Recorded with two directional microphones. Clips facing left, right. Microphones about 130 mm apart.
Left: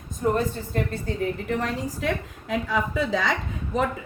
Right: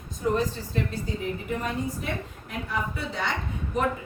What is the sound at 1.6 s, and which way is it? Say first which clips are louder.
A woman's voice: left 2 dB; 90° left.